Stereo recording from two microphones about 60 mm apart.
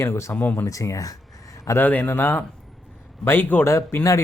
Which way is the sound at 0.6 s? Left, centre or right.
Left.